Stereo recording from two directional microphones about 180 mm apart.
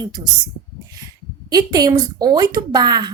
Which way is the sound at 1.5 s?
20° right (ahead or behind).